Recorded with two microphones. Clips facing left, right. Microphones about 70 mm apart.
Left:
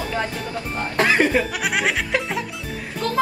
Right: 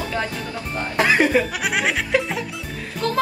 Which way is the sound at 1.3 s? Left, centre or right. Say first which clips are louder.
Right 1 dB; centre.